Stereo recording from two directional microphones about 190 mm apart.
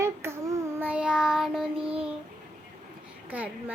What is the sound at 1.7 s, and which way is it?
Child singing, 30° right (ahead or behind).